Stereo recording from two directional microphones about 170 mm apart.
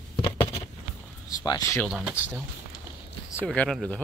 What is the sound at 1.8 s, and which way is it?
Speech, centre (ahead or behind).